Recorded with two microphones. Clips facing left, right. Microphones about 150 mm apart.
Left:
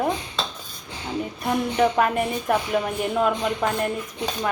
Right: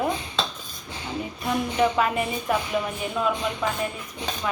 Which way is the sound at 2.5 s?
55° left (ahead or behind).